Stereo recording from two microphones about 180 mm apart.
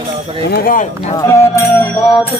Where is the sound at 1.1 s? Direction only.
15° left (ahead or behind).